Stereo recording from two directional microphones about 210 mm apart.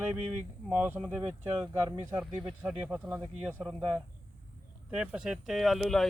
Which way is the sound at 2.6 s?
5° right (ahead or behind).